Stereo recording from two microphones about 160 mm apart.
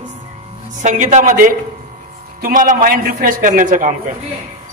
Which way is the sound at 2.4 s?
55° right (ahead or behind).